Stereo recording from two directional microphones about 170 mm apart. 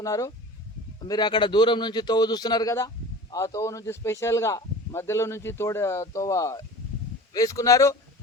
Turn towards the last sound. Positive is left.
turn(degrees=20)  # may be behind; listen again after turning